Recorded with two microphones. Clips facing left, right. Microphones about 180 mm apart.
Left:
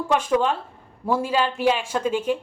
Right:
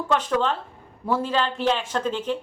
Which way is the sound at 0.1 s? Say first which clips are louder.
Left 2 dB; 10° left (ahead or behind).